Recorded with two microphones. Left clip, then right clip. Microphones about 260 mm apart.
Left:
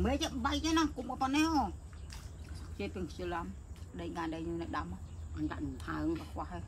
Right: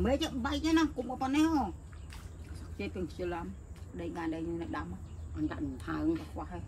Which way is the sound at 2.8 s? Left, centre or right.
Centre.